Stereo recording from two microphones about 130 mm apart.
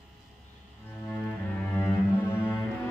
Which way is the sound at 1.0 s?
15° left (ahead or behind).